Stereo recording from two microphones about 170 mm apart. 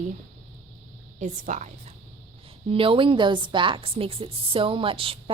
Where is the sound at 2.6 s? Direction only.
30° right (ahead or behind).